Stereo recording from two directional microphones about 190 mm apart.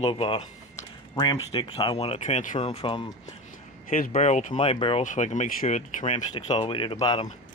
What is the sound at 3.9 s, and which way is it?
Speech, 45° left (ahead or behind).